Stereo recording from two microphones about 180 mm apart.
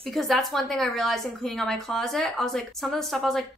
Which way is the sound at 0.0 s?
Centre (ahead or behind).